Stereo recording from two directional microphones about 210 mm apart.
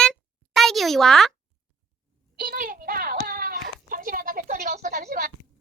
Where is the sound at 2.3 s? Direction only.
45° right (ahead or behind).